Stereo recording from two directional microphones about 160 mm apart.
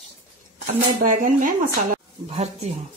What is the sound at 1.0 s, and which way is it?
Speech, 55° right (ahead or behind).